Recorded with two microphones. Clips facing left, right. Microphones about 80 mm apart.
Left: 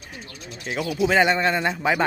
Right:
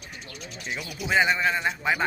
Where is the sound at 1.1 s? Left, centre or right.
Left.